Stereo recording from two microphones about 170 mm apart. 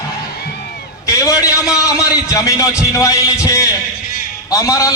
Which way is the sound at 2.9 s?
20° left (ahead or behind).